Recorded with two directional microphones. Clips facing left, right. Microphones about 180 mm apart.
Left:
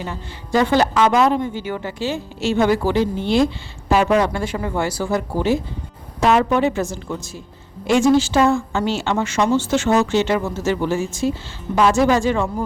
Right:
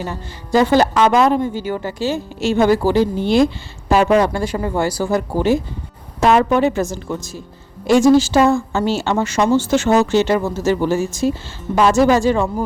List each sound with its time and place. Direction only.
0.0 s a woman's voice: 40° right (ahead or behind)